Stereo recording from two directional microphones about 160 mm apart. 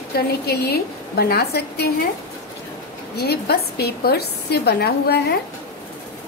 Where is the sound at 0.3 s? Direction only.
80° left.